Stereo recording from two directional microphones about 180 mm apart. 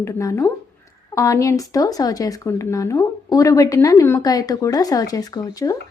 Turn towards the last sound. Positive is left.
turn(degrees=20)  # may be behind; listen again after turning